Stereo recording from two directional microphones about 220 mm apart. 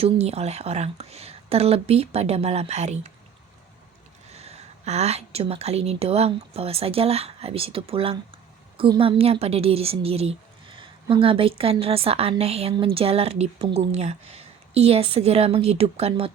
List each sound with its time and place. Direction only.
0.0 s a woman's voice: 30° right (ahead or behind)
4.3 s a woman's voice: 30° right (ahead or behind)